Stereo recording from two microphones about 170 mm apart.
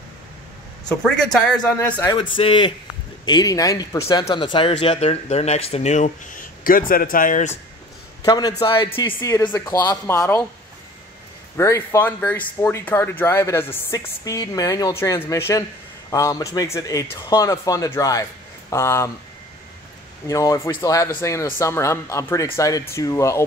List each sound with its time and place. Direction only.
0.8 s speech: 5° left (ahead or behind)
2.1 s speech: 30° left (ahead or behind); by 7.5 s 50° left (ahead or behind)
8.2 s speech: 25° left (ahead or behind)
11.5 s speech: 15° left (ahead or behind)
20.2 s speech: 20° left (ahead or behind)